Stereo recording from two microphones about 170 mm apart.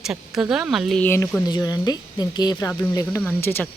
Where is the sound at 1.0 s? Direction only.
10° left (ahead or behind).